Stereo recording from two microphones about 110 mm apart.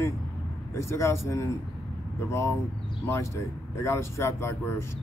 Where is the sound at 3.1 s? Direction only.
25° left (ahead or behind).